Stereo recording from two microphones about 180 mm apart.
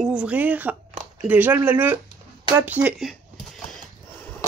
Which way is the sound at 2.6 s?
10° right (ahead or behind).